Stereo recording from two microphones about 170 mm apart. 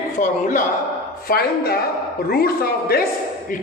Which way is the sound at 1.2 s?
65° left (ahead or behind).